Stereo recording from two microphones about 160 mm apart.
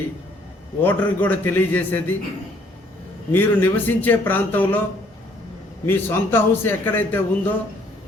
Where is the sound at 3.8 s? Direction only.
10° left (ahead or behind).